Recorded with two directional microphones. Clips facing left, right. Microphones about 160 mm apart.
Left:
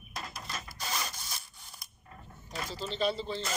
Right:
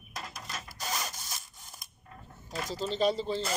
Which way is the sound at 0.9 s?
40° right (ahead or behind).